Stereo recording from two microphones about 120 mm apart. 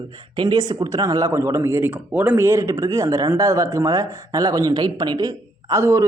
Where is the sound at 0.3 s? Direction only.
40° right (ahead or behind).